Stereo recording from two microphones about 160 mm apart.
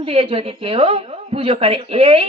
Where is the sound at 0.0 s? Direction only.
35° right (ahead or behind).